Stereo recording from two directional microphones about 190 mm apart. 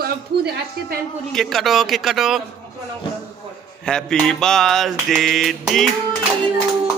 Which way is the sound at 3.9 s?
5° left (ahead or behind).